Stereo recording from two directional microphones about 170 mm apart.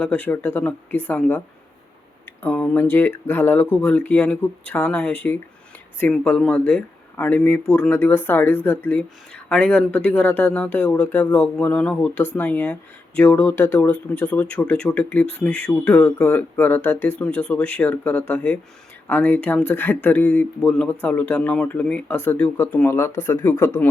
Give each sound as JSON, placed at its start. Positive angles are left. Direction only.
{"t": 0.0, "sound": "speech", "side_deg": 10}